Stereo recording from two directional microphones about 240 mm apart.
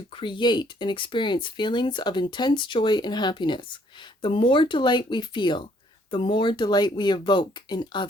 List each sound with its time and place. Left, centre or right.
0.2 s speech: centre